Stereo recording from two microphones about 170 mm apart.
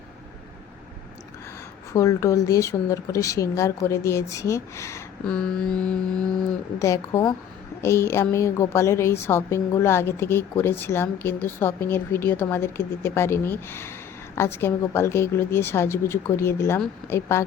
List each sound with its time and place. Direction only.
1.9 s speech: 20° left (ahead or behind)
5.3 s a sound: 5° left (ahead or behind)
6.7 s a woman's voice: 20° left (ahead or behind)